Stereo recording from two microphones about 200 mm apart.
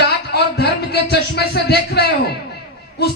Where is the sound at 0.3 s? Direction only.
55° left (ahead or behind).